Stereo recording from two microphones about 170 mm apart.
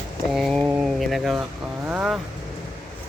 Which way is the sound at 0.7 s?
Centre (ahead or behind).